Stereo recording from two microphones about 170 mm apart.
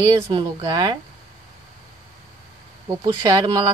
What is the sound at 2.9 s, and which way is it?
Speech, 20° right (ahead or behind).